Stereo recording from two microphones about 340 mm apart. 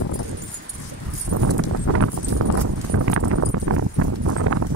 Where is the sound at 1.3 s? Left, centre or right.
Right.